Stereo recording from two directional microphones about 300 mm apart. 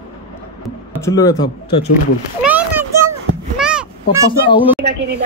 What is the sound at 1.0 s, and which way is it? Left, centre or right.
Speech, centre.